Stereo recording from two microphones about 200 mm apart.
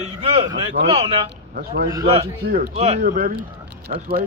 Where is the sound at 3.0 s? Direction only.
45° right (ahead or behind).